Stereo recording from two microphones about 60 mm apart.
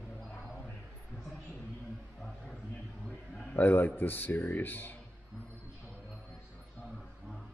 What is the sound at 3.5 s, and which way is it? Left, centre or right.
Speech, left.